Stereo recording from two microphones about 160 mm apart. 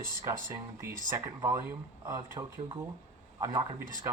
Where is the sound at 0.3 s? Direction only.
15° right (ahead or behind).